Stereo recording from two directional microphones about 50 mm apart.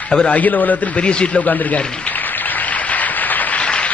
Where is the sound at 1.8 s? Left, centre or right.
Centre.